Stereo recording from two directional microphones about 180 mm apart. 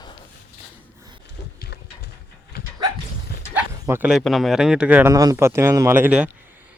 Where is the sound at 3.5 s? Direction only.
10° right (ahead or behind).